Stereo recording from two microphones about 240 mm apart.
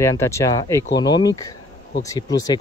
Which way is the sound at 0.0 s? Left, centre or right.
Centre.